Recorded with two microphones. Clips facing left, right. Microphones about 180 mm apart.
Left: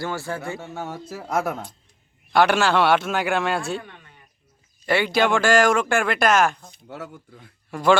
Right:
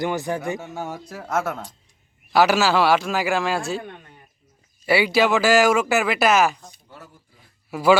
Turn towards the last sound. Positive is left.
turn(degrees=-5)  # may be behind; listen again after turning